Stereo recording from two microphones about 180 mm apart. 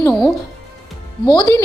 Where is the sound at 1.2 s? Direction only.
25° left (ahead or behind).